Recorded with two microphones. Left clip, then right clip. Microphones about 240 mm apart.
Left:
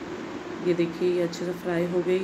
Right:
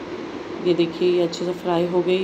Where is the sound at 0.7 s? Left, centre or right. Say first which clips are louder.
Right 5 dB; centre.